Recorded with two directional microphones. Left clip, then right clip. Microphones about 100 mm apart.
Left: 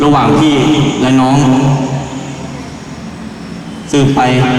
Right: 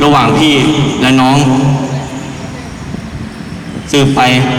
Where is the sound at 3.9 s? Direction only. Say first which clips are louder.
Right 2 dB; 30° right (ahead or behind).